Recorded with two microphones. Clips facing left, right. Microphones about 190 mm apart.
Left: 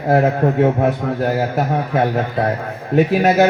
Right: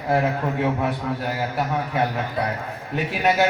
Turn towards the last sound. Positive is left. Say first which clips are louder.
# left 8 dB
turn(degrees=40)  # may be behind; listen again after turning